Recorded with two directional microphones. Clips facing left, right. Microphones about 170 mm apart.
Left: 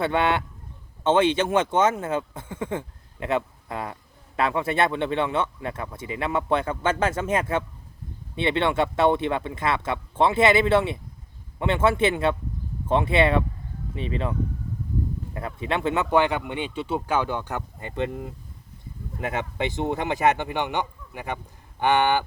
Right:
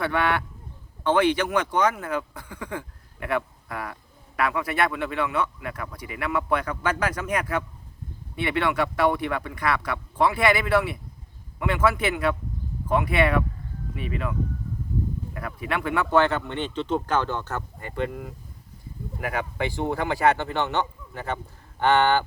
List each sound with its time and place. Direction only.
0.0 s speech: 25° left (ahead or behind)